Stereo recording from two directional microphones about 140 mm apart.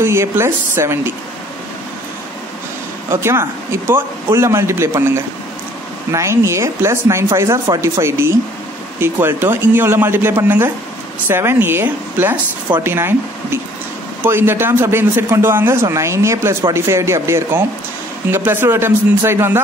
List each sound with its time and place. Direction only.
0.0 s a man's voice: 20° right (ahead or behind)
3.1 s a man's voice: 20° right (ahead or behind)